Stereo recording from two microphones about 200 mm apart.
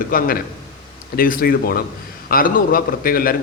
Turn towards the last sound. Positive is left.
turn(degrees=45)  # may be behind; listen again after turning